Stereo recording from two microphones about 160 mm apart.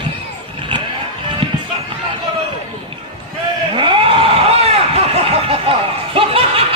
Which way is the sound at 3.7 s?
30° right (ahead or behind).